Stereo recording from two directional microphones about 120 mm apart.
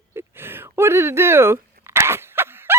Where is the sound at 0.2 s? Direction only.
20° right (ahead or behind).